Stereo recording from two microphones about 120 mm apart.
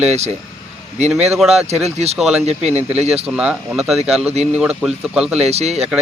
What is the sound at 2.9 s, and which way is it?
Speech, 60° right (ahead or behind).